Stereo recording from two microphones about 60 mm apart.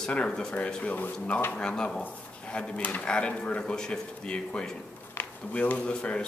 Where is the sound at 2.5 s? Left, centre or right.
Left.